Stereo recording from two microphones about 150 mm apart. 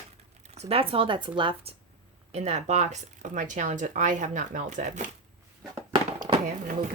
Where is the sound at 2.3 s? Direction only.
45° right (ahead or behind).